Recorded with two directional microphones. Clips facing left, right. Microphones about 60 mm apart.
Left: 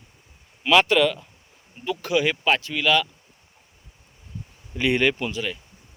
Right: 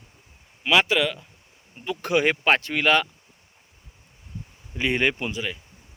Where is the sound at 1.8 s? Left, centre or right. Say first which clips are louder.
Right 1 dB; right.